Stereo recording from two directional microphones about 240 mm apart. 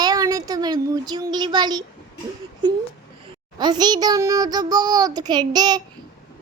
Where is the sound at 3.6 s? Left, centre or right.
Centre.